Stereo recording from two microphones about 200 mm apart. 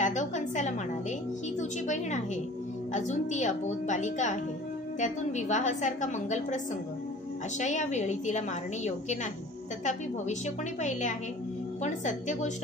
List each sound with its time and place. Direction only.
0.0 s a woman's voice: 40° left (ahead or behind)
1.6 s music: 35° left (ahead or behind)
2.9 s a woman's voice: 35° left (ahead or behind)
10.8 s a woman's voice: 35° left (ahead or behind)